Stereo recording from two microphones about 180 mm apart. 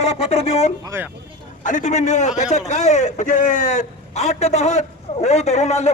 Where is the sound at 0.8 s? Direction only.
15° right (ahead or behind).